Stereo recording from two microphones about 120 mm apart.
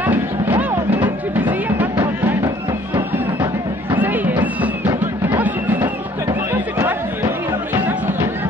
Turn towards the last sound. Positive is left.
turn(degrees=-20)  # may be behind; listen again after turning